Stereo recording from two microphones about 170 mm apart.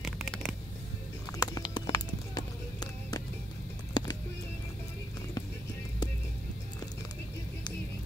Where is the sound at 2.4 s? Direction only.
25° left (ahead or behind).